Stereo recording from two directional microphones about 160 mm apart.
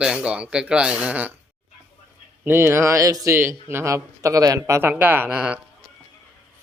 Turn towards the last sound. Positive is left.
turn(degrees=-10)  # may be behind; listen again after turning